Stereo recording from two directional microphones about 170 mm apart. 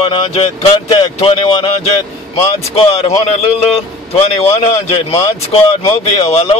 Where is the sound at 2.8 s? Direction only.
35° left (ahead or behind).